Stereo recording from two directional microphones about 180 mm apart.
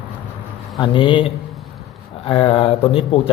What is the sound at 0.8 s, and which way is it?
Speech, 25° left (ahead or behind).